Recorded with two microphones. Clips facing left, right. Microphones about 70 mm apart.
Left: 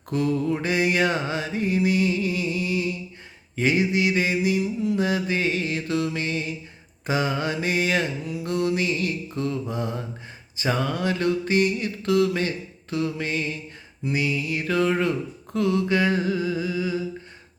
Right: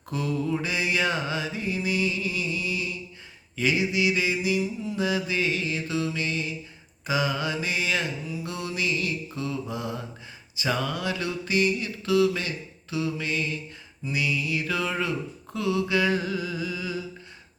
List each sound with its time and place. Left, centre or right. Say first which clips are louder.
0.1 s mantra: left 4 dB; left
4.9 s mantra: right 1 dB; left
15.5 s a sound: left 3 dB; left